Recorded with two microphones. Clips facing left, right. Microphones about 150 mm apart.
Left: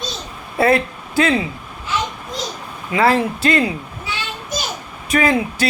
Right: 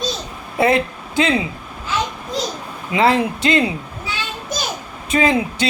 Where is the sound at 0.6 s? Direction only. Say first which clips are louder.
Left 1 dB; 20° right (ahead or behind).